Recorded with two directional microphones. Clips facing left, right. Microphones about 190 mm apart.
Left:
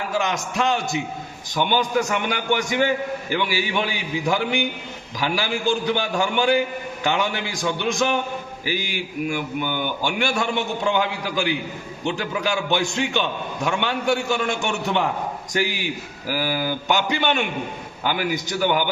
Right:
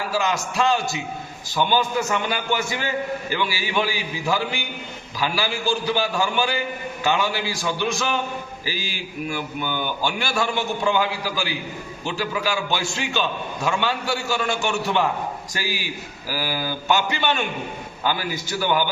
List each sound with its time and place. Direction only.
0.1 s a man's voice: 20° left (ahead or behind)